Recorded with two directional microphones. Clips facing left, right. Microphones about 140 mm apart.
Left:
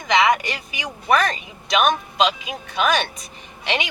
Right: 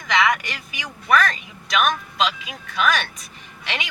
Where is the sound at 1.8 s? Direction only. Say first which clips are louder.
Left 3 dB; 25° left (ahead or behind).